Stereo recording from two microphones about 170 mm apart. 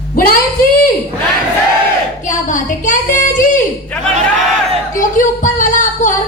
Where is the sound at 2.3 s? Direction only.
50° left (ahead or behind).